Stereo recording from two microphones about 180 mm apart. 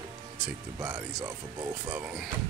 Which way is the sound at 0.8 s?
15° right (ahead or behind).